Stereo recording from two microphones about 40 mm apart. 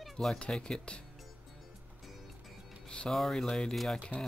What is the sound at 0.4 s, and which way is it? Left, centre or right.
Speech, left.